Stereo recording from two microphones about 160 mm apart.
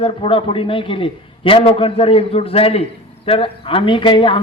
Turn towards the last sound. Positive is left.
turn(degrees=30)  # may be behind; listen again after turning